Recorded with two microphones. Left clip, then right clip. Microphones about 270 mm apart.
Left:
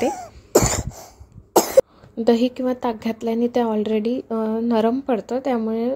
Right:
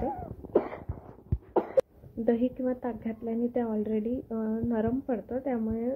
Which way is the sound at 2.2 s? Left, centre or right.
Left.